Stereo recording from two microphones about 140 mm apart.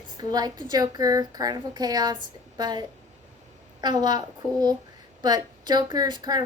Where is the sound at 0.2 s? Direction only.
30° right (ahead or behind).